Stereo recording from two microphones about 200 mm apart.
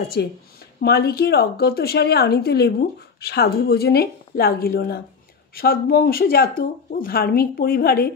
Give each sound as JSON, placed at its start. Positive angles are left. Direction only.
{"t": 0.2, "sound": "a woman's voice", "side_deg": 55}